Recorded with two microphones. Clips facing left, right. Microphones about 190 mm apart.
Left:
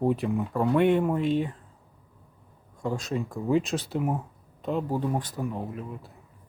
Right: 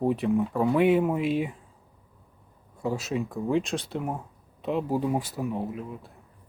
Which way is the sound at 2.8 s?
5° right (ahead or behind).